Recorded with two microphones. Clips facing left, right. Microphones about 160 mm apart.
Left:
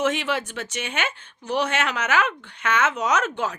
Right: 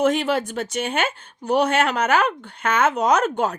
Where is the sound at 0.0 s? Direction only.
40° right (ahead or behind).